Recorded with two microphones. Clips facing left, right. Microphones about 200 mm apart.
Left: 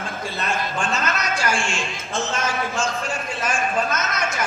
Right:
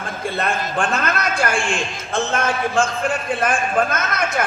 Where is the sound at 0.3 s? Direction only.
55° right (ahead or behind).